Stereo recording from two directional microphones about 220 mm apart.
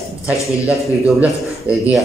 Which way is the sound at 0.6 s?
5° right (ahead or behind).